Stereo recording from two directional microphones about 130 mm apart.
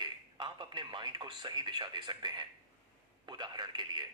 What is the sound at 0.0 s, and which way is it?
A man's voice, 35° right (ahead or behind).